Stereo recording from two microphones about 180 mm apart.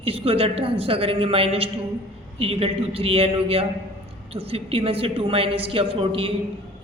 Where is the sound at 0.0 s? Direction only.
30° right (ahead or behind).